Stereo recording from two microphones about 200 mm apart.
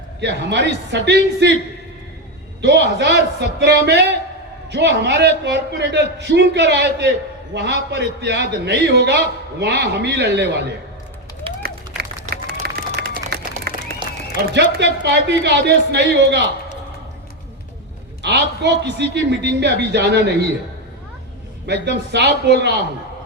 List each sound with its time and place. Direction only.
0.2 s a man's voice: 60° right (ahead or behind)
2.6 s a man's voice: 60° right (ahead or behind)
11.5 s run: 25° right (ahead or behind)
12.3 s applause: 50° right (ahead or behind)
14.4 s a man's voice: 60° right (ahead or behind)
18.2 s a man's voice: 60° right (ahead or behind)
21.7 s a man's voice: 55° right (ahead or behind)